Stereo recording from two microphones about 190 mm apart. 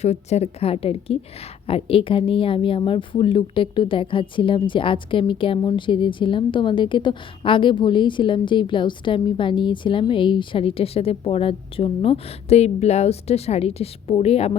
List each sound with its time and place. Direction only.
0.0 s a woman's voice: 35° left (ahead or behind)